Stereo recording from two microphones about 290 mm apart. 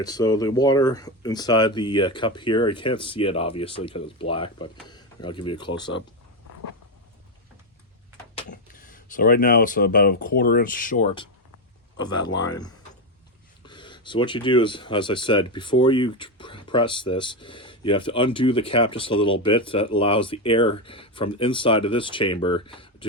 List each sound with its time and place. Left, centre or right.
0.0 s speech: centre
8.4 s speech: left